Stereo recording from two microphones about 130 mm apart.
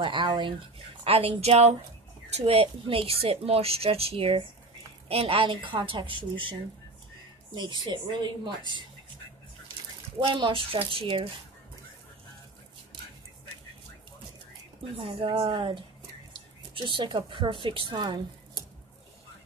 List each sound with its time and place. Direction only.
0.0 s a woman's voice: 40° right (ahead or behind)
7.5 s speech: 35° right (ahead or behind)
10.1 s a woman's voice: 40° right (ahead or behind)
15.0 s speech: 40° right (ahead or behind)